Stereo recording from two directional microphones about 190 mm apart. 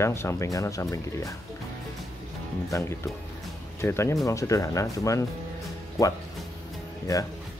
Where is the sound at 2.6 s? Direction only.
15° left (ahead or behind).